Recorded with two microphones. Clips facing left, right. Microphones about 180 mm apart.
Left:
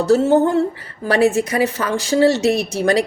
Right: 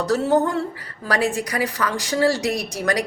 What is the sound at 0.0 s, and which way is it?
A woman's voice, 25° left (ahead or behind).